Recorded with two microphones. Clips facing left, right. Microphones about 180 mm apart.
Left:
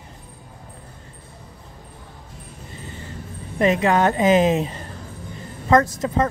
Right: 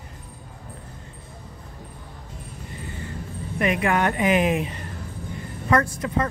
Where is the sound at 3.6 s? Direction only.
25° left (ahead or behind).